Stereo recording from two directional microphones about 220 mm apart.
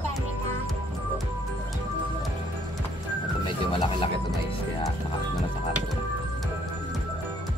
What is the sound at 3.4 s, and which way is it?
Speech, 25° left (ahead or behind).